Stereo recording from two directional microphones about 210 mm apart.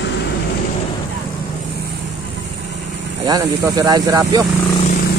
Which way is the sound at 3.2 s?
15° right (ahead or behind).